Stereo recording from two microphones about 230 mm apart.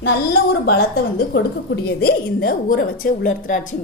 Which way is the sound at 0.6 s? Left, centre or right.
Left.